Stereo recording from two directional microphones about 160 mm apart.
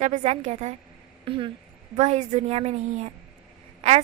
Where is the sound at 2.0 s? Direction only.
45° right (ahead or behind).